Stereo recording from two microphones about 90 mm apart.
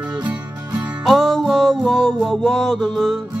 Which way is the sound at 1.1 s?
Centre (ahead or behind).